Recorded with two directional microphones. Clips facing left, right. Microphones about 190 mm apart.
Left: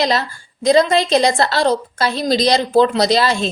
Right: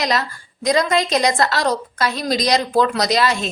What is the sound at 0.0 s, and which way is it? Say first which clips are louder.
A woman's voice: left 3 dB; 30° left (ahead or behind).